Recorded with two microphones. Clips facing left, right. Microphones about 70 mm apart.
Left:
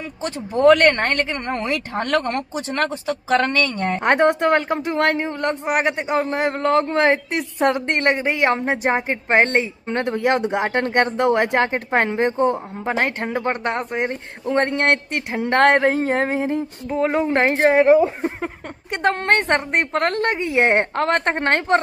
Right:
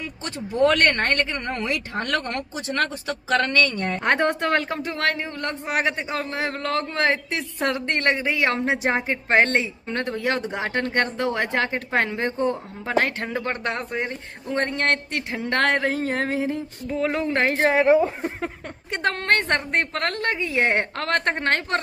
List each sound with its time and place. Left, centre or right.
0.6 s a woman's voice: left
1.0 s speech: left
3.3 s a woman's voice: left
17.9 s speech: centre
19.0 s a woman's voice: left